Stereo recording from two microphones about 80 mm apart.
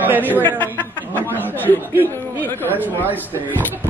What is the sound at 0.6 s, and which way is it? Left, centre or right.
Speech, left.